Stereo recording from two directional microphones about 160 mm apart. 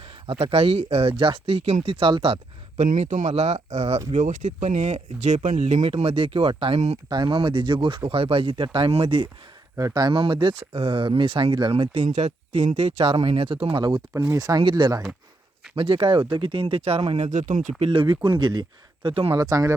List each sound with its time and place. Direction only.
0.0 s speech: 35° right (ahead or behind)
5.8 s speech: 35° right (ahead or behind)
6.7 s speech: 45° right (ahead or behind)
7.1 s speech: 30° right (ahead or behind)
9.7 s speech: 20° right (ahead or behind); by 19.3 s 35° right (ahead or behind)
19.3 s speech: 20° right (ahead or behind)